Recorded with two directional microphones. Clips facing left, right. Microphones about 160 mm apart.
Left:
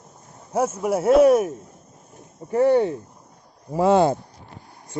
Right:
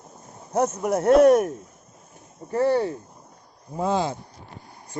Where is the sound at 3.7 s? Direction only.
80° left.